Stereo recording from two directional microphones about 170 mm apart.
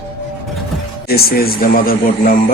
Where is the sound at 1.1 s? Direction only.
60° left (ahead or behind).